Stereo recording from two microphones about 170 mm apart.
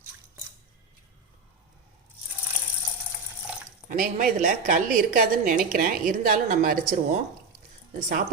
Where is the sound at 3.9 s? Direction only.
50° right (ahead or behind).